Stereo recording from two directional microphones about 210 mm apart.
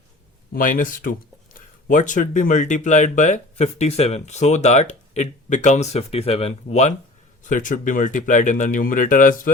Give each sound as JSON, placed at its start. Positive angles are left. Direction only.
{"t": 0.5, "sound": "speech", "side_deg": 40}